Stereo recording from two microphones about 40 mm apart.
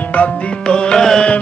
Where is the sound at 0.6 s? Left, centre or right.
Left.